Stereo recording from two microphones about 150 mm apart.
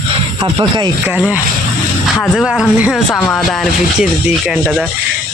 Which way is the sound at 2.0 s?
Centre (ahead or behind).